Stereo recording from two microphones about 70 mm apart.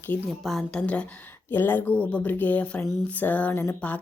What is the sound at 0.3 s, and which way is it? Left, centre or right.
Speech, centre.